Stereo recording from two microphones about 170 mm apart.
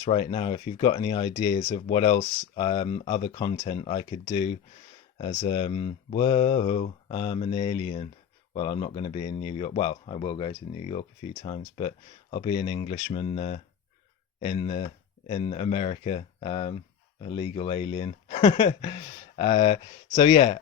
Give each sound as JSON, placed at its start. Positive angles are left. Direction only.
{"t": 0.1, "sound": "speech", "side_deg": 35}